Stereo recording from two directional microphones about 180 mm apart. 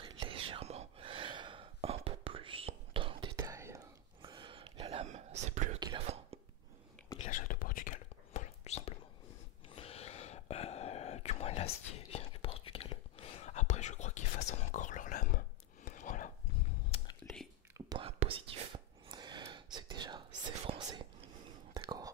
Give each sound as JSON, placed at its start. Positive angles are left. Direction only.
{"t": 0.0, "sound": "whispering", "side_deg": -30}
{"t": 3.3, "sound": "whispering", "side_deg": -15}
{"t": 5.8, "sound": "whispering", "side_deg": -25}
{"t": 7.2, "sound": "whispering", "side_deg": 45}
{"t": 16.9, "sound": "whispering", "side_deg": 25}
{"t": 17.7, "sound": "whispering", "side_deg": -25}